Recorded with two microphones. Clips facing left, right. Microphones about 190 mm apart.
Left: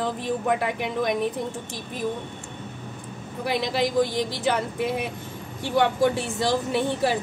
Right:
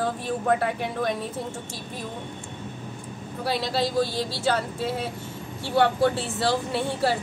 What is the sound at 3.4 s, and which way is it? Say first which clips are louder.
Speech: left 1 dB; 15° left (ahead or behind).